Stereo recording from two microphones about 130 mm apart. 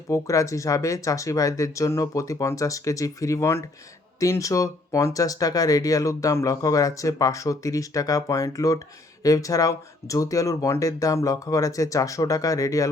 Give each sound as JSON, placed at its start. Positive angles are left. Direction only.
{"t": 0.1, "sound": "speech", "side_deg": 25}